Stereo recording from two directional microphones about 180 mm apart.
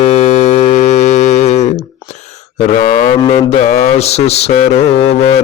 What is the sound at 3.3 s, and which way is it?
Mantra, 40° left (ahead or behind).